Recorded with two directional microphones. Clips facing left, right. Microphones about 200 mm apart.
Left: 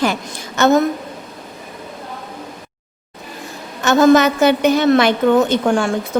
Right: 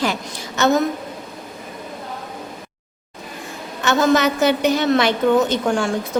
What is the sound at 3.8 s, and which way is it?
A woman's voice, 50° left (ahead or behind).